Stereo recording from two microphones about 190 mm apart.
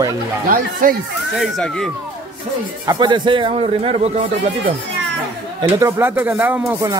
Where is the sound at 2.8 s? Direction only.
20° right (ahead or behind).